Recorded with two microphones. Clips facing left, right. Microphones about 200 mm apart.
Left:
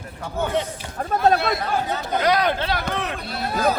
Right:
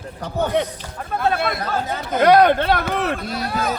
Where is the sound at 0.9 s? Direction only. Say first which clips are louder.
Left 3 dB; 40° left (ahead or behind).